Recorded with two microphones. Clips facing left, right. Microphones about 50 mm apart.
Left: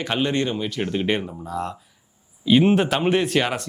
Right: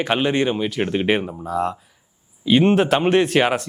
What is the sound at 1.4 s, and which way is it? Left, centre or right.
A man's voice, centre.